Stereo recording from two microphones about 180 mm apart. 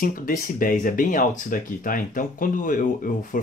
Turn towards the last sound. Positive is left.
turn(degrees=45)  # may be behind; listen again after turning